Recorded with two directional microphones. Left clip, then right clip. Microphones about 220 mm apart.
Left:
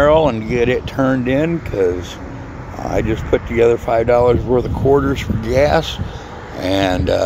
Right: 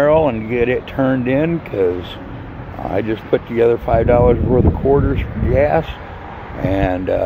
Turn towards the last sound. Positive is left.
turn(degrees=10)  # may be behind; listen again after turning